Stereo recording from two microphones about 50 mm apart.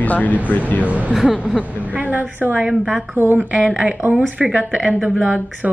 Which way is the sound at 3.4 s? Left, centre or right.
Right.